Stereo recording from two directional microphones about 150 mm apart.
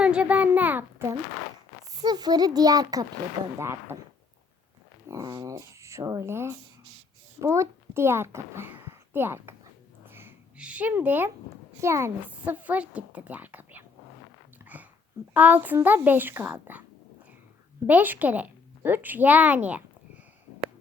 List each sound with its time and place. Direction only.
0.0 s a child's voice: 5° right (ahead or behind)
2.0 s a woman's voice: 25° right (ahead or behind)
5.0 s a child's voice: 25° right (ahead or behind)
10.1 s a sound: 15° right (ahead or behind)
11.8 s a woman's voice: 20° right (ahead or behind)
14.6 s a sound: 10° right (ahead or behind)
15.3 s a woman's voice: 10° right (ahead or behind)
17.8 s a woman's voice: 10° right (ahead or behind)